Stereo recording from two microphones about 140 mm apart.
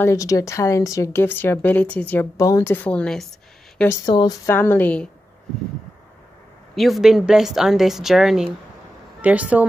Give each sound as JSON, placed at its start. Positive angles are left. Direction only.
{"t": 0.0, "sound": "speech", "side_deg": 20}
{"t": 4.0, "sound": "speech", "side_deg": 30}
{"t": 4.5, "sound": "speech", "side_deg": 15}
{"t": 6.7, "sound": "a woman's voice", "side_deg": 0}